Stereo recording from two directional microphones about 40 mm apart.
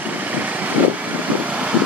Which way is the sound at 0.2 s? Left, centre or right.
Right.